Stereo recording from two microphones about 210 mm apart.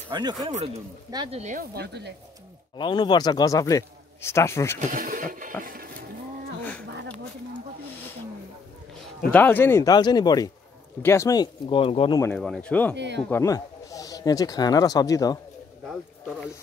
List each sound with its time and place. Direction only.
0.1 s speech: 20° right (ahead or behind)
1.4 s speech: 40° right (ahead or behind)
2.8 s speech: 20° left (ahead or behind)
4.9 s a sound: 40° right (ahead or behind)
9.3 s speech: 10° left (ahead or behind); by 12.2 s 25° left (ahead or behind)
12.4 s speech: centre (ahead or behind)
12.9 s speech: 55° right (ahead or behind)
13.3 s speech: 15° left (ahead or behind)